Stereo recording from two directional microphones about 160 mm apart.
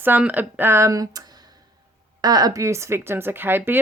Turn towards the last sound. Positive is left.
turn(degrees=-15)  # may be behind; listen again after turning